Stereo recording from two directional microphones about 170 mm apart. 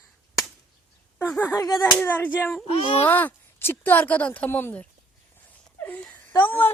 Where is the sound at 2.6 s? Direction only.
35° left (ahead or behind).